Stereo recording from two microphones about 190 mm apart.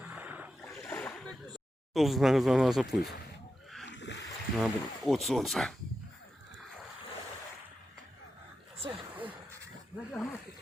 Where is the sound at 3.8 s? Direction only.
70° left (ahead or behind).